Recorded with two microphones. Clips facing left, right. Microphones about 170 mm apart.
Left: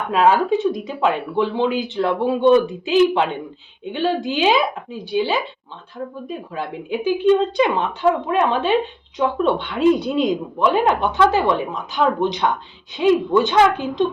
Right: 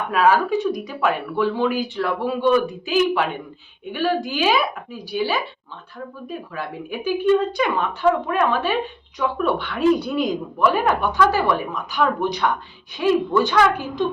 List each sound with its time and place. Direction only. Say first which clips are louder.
0.1 s speech: left 2 dB; 25° left (ahead or behind)